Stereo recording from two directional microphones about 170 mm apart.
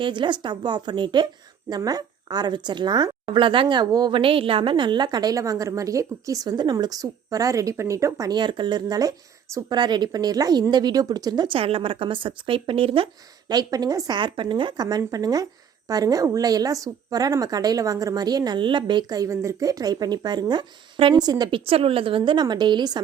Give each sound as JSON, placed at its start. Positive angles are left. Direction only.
{"t": 0.0, "sound": "a woman's voice", "side_deg": -30}
{"t": 13.5, "sound": "a woman's voice", "side_deg": -20}